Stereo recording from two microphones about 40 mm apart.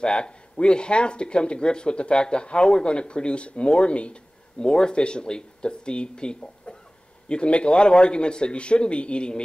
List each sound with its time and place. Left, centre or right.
0.0 s speech: left